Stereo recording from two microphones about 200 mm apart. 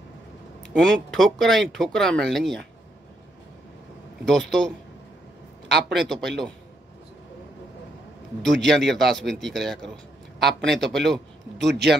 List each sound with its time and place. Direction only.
0.7 s speech: 5° left (ahead or behind)
4.2 s speech: 5° left (ahead or behind)
5.9 s speech: centre (ahead or behind)
8.4 s speech: centre (ahead or behind)
11.5 s speech: 55° right (ahead or behind)